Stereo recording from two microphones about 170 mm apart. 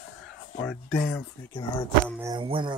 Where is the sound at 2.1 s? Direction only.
20° right (ahead or behind).